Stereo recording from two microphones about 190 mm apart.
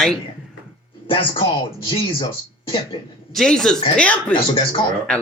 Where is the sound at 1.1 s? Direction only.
25° left (ahead or behind).